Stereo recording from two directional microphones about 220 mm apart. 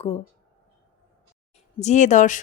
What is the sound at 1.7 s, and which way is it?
Speech, 30° left (ahead or behind).